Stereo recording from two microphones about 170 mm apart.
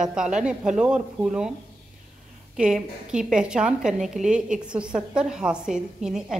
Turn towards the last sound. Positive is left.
turn(degrees=-5)  # may be behind; listen again after turning